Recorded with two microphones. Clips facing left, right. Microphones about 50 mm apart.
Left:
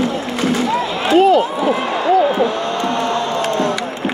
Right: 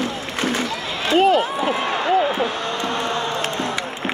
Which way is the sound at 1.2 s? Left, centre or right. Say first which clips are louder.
Left 4 dB; right.